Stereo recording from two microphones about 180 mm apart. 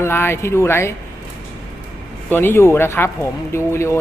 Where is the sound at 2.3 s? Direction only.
10° left (ahead or behind).